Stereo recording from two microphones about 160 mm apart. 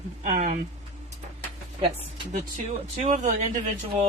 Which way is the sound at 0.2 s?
55° right (ahead or behind).